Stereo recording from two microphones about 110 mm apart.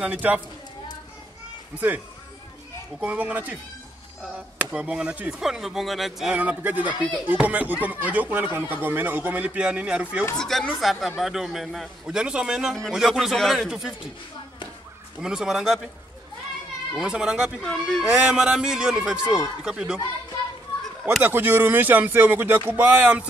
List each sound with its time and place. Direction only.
0.0 s speech: 15° right (ahead or behind)
3.0 s speech: 15° right (ahead or behind)
6.3 s speech: 15° right (ahead or behind)
10.3 s speech: 5° left (ahead or behind)
15.1 s speech: 5° right (ahead or behind)
16.9 s speech: 5° right (ahead or behind)
17.6 s speech: 5° left (ahead or behind)
18.1 s speech: 5° right (ahead or behind)
21.0 s speech: 20° right (ahead or behind)